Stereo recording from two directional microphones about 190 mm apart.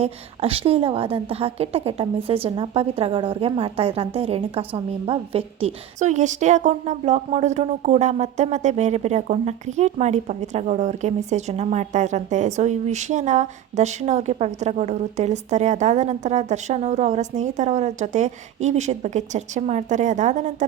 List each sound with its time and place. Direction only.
0.0 s a woman's voice: 30° right (ahead or behind)